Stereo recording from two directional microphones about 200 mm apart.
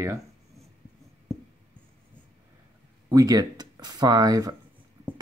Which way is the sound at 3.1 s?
20° right (ahead or behind).